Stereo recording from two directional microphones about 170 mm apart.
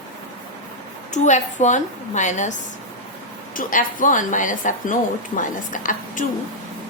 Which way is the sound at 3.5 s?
50° left (ahead or behind).